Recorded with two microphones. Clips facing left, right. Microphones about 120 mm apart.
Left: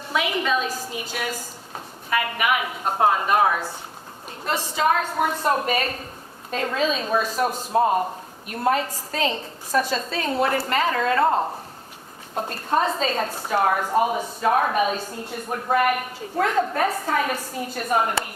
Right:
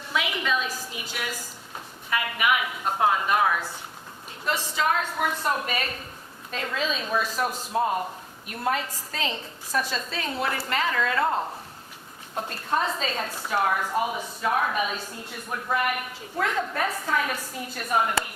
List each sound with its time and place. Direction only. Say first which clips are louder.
0.1 s a woman's voice: left 4 dB; 40° left (ahead or behind)